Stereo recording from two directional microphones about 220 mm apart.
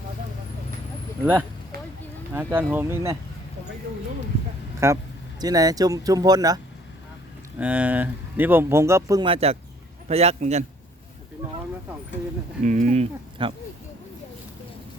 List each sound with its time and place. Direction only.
1.2 s speech: 10° right (ahead or behind)
4.8 s speech: 15° right (ahead or behind)
7.6 s a man's voice: 5° right (ahead or behind); by 10.6 s 30° right (ahead or behind)
12.6 s speech: 35° right (ahead or behind)